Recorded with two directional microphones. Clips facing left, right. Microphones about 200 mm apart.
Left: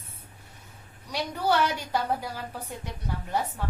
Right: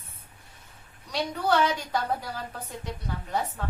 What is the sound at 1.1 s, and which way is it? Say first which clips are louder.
Speech: right 1 dB; 10° left (ahead or behind).